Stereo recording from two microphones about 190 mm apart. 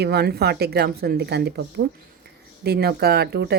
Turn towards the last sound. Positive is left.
turn(degrees=-60)  # may be behind; listen again after turning